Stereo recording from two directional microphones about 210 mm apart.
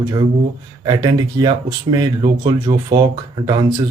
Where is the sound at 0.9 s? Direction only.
20° right (ahead or behind).